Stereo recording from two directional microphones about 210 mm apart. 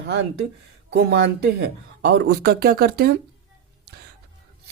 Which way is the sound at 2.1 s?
50° right (ahead or behind).